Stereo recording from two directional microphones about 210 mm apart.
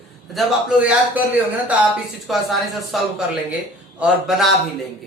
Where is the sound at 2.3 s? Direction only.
Centre (ahead or behind).